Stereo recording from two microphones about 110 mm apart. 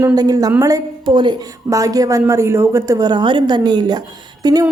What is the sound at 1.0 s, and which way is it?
Speech, 45° right (ahead or behind).